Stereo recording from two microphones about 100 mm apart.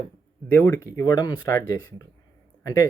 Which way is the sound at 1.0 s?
45° left (ahead or behind).